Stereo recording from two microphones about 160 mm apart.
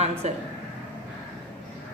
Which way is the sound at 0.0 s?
40° right (ahead or behind).